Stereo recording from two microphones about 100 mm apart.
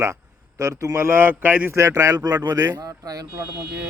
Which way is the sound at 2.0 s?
35° right (ahead or behind).